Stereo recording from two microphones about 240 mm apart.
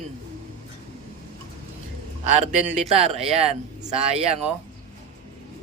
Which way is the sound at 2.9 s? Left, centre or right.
Right.